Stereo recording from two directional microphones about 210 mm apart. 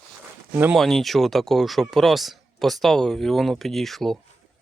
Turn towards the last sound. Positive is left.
turn(degrees=0)  # may be behind; listen again after turning